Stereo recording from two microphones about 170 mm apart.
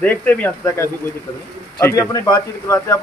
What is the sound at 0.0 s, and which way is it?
A man's voice, 10° left (ahead or behind).